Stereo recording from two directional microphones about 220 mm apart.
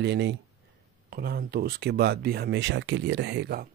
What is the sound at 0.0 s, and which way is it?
Speech, 50° right (ahead or behind).